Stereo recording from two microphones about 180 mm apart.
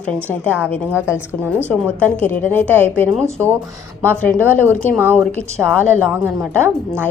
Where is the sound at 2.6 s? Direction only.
10° right (ahead or behind).